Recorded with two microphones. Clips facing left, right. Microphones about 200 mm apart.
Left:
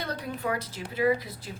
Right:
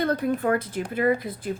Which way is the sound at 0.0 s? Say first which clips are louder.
Right 9 dB; 50° right (ahead or behind).